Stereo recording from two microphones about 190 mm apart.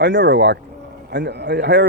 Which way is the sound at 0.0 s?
65° right (ahead or behind).